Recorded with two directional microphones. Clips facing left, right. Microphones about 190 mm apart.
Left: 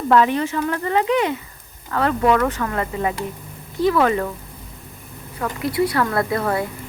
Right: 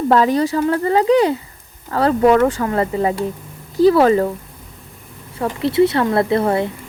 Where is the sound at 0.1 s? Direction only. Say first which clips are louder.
Right 1 dB; 35° right (ahead or behind).